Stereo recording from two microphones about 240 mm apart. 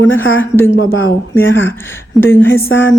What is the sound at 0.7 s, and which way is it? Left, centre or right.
Speech, left.